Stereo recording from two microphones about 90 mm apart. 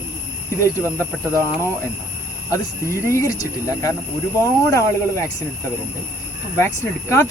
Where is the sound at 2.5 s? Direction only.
30° left (ahead or behind).